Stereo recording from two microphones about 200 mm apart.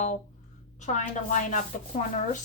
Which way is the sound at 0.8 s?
35° left (ahead or behind).